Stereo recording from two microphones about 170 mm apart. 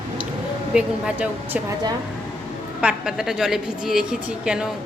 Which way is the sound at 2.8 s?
5° right (ahead or behind).